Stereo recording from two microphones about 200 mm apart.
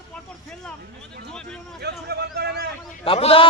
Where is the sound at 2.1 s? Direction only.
55° right (ahead or behind).